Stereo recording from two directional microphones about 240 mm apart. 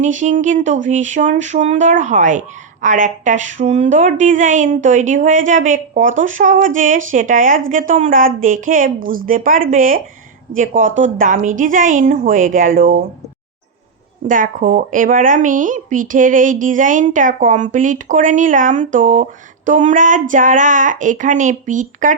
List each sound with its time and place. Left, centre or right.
0.0 s speech: right
14.3 s speech: right